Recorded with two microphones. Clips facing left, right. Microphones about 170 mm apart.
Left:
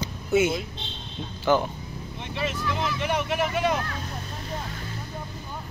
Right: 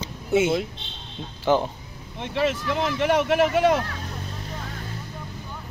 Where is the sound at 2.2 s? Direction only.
80° right.